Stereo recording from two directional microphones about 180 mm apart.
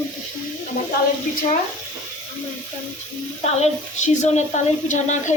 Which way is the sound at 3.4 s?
40° left (ahead or behind).